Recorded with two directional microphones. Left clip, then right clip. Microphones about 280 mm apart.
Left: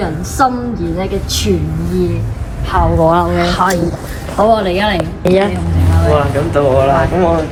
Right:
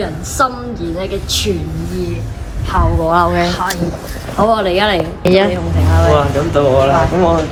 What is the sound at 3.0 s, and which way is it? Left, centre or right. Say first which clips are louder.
A woman's voice: left 1 dB; centre.